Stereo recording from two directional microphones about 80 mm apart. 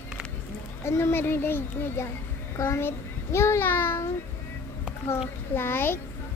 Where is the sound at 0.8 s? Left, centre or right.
Left.